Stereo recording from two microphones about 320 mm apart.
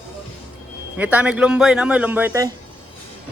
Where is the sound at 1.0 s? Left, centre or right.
Centre.